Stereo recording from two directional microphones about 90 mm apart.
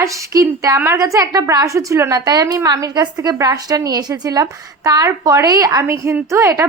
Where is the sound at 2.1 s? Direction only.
45° right (ahead or behind).